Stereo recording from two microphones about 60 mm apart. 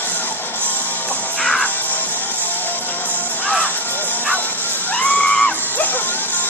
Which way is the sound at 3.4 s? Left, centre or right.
Left.